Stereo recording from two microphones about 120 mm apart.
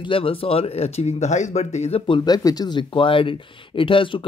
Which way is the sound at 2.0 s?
40° left (ahead or behind).